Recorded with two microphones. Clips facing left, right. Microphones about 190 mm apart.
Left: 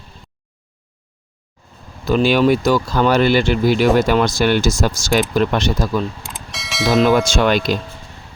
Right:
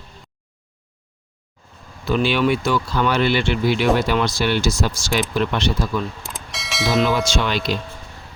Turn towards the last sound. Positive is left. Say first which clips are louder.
# left 6 dB
turn(degrees=50)  # may be behind; listen again after turning